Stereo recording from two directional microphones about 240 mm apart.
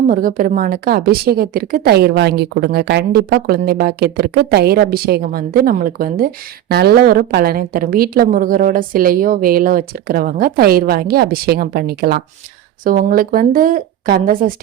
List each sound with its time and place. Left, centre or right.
0.1 s a woman's voice: right